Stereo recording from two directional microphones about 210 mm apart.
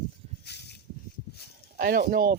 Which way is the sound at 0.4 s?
50° left (ahead or behind).